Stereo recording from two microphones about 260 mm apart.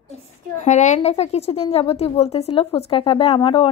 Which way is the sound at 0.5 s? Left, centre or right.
Left.